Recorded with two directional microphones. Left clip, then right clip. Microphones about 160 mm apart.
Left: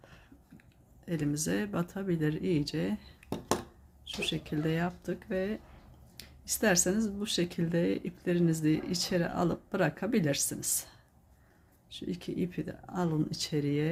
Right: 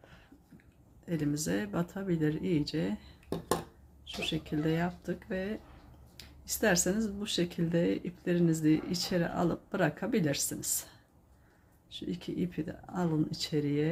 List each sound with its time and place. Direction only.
1.0 s speech: 5° left (ahead or behind)
4.0 s speech: 10° left (ahead or behind)
11.9 s speech: 5° left (ahead or behind)